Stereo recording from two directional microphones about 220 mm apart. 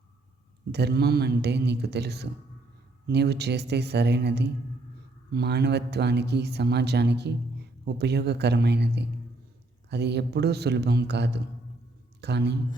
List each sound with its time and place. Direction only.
0.7 s speech: 50° right (ahead or behind)